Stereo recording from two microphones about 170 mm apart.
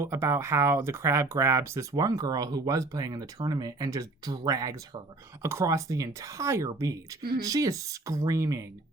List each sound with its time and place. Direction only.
0.0 s speech: 15° right (ahead or behind)